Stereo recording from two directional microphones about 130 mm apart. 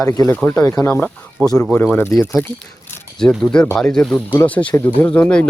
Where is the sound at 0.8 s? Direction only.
15° left (ahead or behind).